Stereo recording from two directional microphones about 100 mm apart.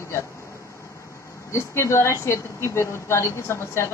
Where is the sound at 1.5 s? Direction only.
30° left (ahead or behind).